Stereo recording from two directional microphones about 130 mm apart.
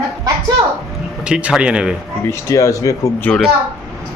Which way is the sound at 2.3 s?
25° left (ahead or behind).